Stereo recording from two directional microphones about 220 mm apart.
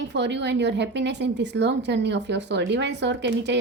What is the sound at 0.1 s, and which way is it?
A woman's voice, 50° right (ahead or behind).